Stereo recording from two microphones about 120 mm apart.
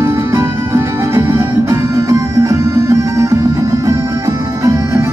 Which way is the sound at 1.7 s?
30° right (ahead or behind).